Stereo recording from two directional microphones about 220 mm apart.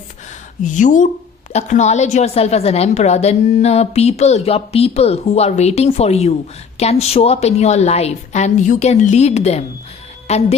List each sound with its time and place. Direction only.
0.6 s a woman's voice: 35° left (ahead or behind)